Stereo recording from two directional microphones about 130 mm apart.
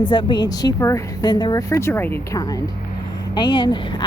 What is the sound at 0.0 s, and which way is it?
A woman's voice, 35° left (ahead or behind).